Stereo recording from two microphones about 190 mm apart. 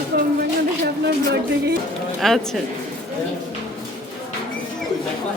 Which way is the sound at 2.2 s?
Centre (ahead or behind).